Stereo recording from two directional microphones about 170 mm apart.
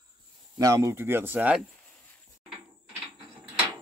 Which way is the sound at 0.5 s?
20° right (ahead or behind).